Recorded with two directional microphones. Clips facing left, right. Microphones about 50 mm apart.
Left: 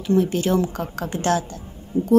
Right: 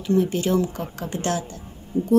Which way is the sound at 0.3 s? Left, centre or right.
Left.